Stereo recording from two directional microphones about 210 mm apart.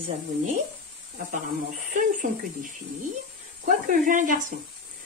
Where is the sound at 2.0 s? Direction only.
40° right (ahead or behind).